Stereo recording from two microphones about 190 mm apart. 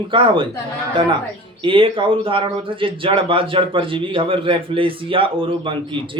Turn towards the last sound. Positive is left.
turn(degrees=-25)  # may be behind; listen again after turning